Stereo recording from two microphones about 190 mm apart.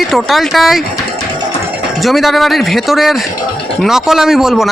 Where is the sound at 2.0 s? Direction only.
Centre (ahead or behind).